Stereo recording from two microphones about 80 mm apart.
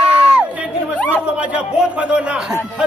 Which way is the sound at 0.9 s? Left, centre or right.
Centre.